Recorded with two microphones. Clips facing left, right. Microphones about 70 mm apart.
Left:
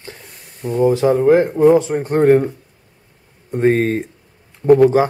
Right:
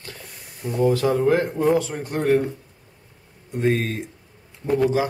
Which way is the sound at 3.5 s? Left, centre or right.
Left.